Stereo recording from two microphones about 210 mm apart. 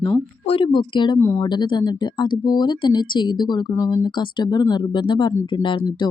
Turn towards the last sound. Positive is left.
turn(degrees=20)  # may be behind; listen again after turning